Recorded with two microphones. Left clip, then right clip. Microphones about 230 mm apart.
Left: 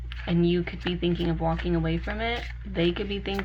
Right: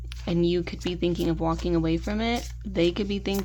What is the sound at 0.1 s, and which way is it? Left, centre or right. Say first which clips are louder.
Speech: right 1 dB; right.